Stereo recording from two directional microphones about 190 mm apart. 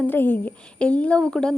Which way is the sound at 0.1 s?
10° left (ahead or behind).